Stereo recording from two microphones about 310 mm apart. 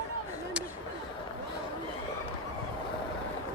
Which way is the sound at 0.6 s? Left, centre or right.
Centre.